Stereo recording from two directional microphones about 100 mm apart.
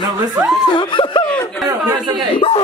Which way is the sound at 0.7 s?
55° left (ahead or behind).